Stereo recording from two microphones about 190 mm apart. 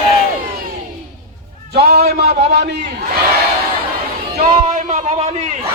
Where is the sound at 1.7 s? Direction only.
60° right (ahead or behind).